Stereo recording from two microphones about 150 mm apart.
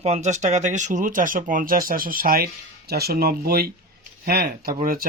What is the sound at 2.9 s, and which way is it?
Speech, 90° right.